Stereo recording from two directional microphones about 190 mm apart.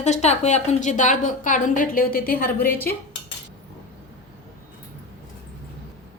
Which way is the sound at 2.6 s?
10° left (ahead or behind).